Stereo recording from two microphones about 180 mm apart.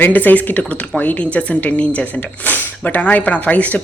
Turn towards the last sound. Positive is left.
turn(degrees=10)  # may be behind; listen again after turning